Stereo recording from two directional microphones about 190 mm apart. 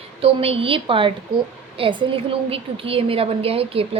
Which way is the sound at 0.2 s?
30° right (ahead or behind).